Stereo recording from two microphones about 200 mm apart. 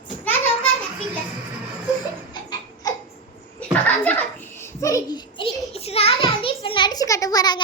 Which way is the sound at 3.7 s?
10° left (ahead or behind).